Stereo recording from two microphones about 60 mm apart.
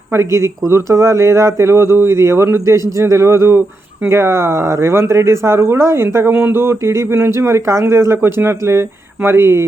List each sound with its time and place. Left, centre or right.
0.1 s speech: right